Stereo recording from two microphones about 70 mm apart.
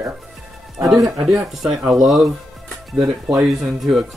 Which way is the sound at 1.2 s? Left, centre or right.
Centre.